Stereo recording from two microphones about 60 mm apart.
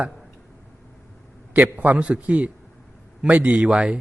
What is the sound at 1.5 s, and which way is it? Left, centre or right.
A man's voice, right.